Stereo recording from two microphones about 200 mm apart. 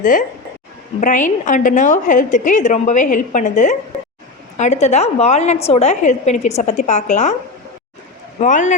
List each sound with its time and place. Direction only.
0.0 s a woman's voice: 40° left (ahead or behind)
8.4 s a woman's voice: 40° left (ahead or behind)